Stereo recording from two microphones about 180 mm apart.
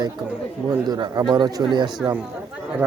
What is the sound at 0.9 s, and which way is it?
Speech, 25° right (ahead or behind).